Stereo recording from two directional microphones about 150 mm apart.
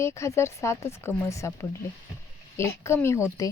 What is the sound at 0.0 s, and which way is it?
Speech, 20° left (ahead or behind).